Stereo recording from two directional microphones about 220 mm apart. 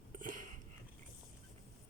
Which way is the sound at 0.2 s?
35° right (ahead or behind).